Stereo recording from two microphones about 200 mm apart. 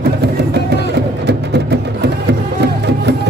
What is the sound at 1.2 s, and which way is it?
Music, 55° right (ahead or behind).